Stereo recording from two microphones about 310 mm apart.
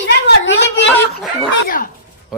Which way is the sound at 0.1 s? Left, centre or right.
Left.